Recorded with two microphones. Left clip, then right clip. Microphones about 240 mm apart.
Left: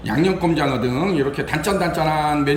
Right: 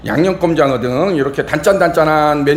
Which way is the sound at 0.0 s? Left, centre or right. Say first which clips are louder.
Right 5 dB; centre.